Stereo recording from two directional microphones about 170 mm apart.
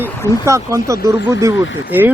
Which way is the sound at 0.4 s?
15° right (ahead or behind).